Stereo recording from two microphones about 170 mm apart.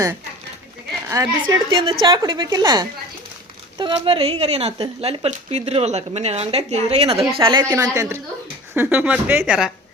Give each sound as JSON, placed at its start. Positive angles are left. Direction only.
{"t": 1.0, "sound": "speech", "side_deg": -15}
{"t": 1.7, "sound": "a woman's voice", "side_deg": -30}
{"t": 7.6, "sound": "speech", "side_deg": -20}